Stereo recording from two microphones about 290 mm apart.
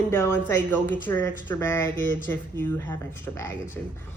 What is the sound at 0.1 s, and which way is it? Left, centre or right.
A woman's voice, centre.